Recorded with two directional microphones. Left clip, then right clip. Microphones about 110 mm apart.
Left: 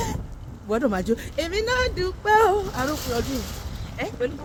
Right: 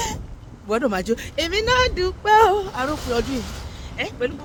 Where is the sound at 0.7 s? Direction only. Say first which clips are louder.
Right 2 dB; 40° right (ahead or behind).